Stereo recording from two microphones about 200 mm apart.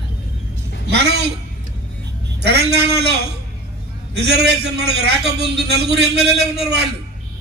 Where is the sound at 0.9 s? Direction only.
55° right (ahead or behind).